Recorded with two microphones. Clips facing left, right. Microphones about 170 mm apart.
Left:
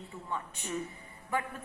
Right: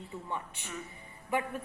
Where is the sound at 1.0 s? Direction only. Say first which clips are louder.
Right 2 dB; 15° right (ahead or behind).